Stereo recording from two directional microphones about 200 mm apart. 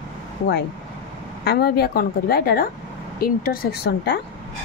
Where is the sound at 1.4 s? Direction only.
55° left (ahead or behind).